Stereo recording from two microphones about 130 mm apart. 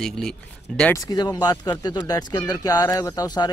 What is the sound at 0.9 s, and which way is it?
Speech, 30° left (ahead or behind).